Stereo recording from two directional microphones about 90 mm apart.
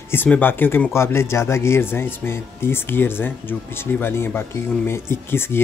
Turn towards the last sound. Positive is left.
turn(degrees=25)  # may be behind; listen again after turning